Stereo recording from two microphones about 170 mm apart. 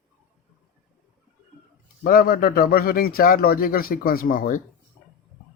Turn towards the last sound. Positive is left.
turn(degrees=60)  # may be behind; listen again after turning